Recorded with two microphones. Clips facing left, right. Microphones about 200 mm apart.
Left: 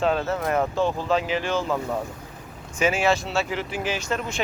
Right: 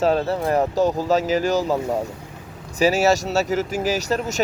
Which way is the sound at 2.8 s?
40° right (ahead or behind).